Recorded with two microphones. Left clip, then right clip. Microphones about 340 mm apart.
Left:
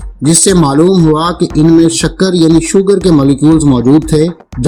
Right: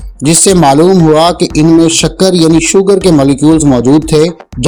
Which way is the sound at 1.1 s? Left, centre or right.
Centre.